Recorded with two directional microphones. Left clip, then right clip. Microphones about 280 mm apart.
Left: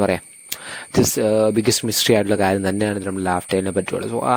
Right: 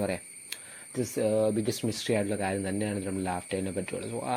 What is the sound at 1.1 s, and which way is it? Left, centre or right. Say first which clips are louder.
Speech: left 7 dB; left.